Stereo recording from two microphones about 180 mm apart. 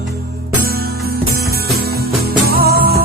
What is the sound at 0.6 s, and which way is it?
Music, 55° right (ahead or behind).